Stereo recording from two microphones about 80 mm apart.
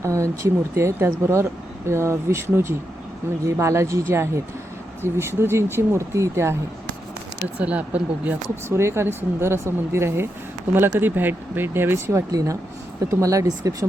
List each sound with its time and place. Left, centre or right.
0.0 s speech: right
7.4 s speech: centre
8.7 s speech: right
13.1 s speech: right